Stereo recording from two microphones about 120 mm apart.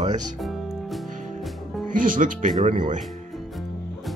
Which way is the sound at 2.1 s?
90° right.